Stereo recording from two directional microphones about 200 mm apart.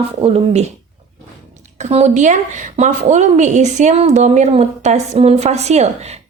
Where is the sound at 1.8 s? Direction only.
35° right (ahead or behind).